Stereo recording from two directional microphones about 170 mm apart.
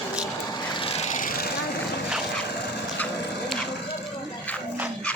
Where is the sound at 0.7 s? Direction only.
30° left (ahead or behind); by 1.5 s 55° left (ahead or behind).